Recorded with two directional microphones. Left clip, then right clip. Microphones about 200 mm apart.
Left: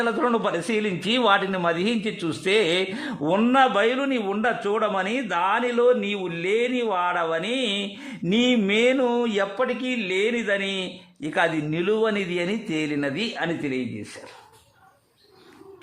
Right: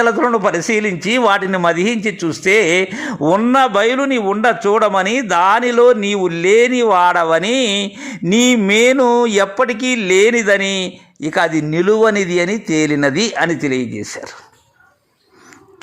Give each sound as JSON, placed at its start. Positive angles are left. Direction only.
{"t": 0.0, "sound": "a man's voice", "side_deg": -20}